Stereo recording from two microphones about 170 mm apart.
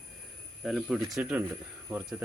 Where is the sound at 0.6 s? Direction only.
Centre (ahead or behind).